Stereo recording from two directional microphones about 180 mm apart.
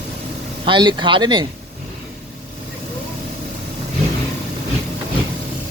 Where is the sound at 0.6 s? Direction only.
25° right (ahead or behind).